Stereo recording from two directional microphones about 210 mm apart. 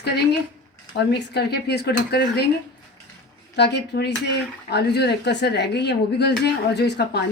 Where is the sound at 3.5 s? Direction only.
55° left (ahead or behind).